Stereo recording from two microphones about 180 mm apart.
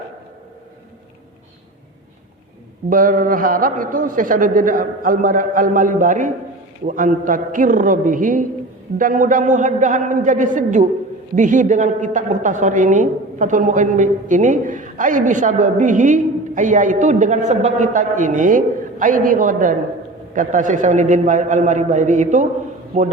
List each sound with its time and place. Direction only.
2.9 s a woman's voice: 50° right (ahead or behind)